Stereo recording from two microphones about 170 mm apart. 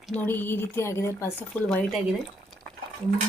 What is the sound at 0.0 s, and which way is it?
Speech, 5° left (ahead or behind).